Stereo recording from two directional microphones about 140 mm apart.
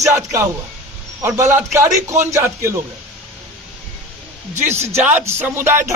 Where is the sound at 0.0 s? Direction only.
20° right (ahead or behind).